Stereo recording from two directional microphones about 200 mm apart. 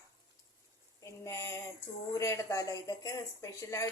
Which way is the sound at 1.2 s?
15° left (ahead or behind).